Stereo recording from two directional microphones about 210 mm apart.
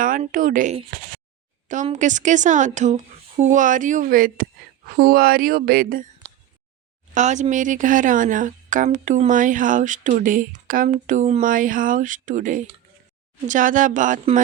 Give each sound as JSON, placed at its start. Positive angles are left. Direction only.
{"t": 0.0, "sound": "speech", "side_deg": -40}
{"t": 7.1, "sound": "speech", "side_deg": -35}